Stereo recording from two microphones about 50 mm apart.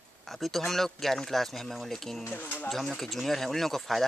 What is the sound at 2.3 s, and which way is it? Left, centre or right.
Speech, left.